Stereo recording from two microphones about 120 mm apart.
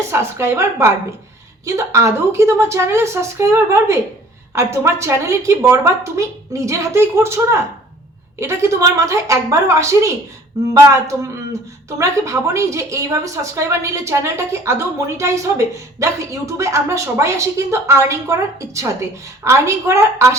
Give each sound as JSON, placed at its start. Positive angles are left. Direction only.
{"t": 0.1, "sound": "a woman's voice", "side_deg": -20}
{"t": 8.4, "sound": "a woman's voice", "side_deg": -25}